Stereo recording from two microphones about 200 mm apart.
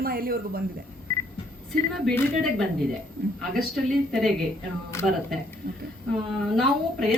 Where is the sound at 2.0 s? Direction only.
5° left (ahead or behind).